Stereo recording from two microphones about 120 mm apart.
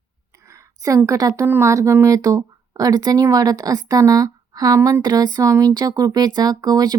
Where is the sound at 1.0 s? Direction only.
30° right (ahead or behind).